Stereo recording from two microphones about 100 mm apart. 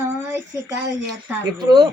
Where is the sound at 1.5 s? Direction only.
45° right (ahead or behind).